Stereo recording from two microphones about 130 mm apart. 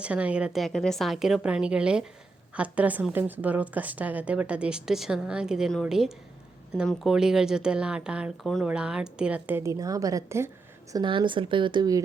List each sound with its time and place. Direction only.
0.0 s a woman's voice: 10° right (ahead or behind)
9.7 s a woman's voice: 25° right (ahead or behind)
10.9 s speech: 35° right (ahead or behind)